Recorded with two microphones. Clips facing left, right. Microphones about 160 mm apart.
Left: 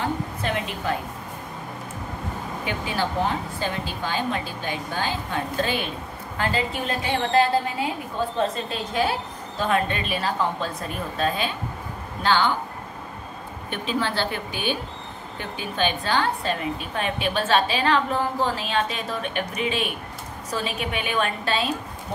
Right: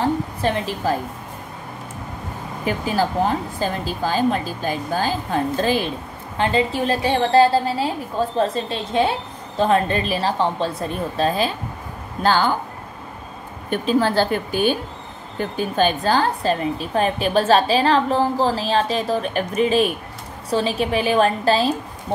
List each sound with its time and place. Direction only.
0.0 s a sound: 35° right (ahead or behind)
2.6 s a woman's voice: 40° right (ahead or behind)
6.3 s a woman's voice: 25° right (ahead or behind); by 12.5 s 40° right (ahead or behind)
13.7 s a woman's voice: 40° right (ahead or behind)